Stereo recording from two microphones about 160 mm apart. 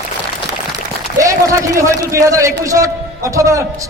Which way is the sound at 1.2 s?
20° right (ahead or behind).